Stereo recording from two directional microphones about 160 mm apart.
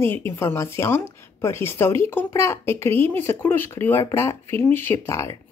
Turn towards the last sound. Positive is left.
turn(degrees=20)  # may be behind; listen again after turning